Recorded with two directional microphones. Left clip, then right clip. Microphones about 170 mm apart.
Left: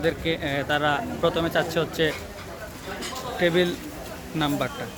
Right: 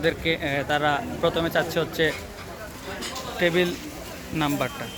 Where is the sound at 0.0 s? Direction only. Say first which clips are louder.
Right 1 dB; 5° right (ahead or behind).